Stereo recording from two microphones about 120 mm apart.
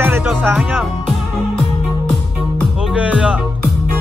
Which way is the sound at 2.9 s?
10° right (ahead or behind).